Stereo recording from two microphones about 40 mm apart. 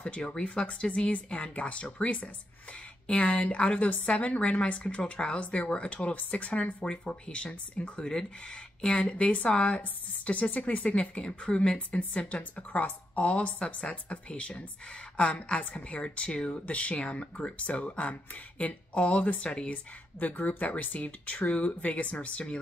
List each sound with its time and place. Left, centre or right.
0.2 s speech: left
6.8 s speech: left
8.9 s speech: left
11.1 s speech: left
18.1 s speech: left
18.9 s speech: left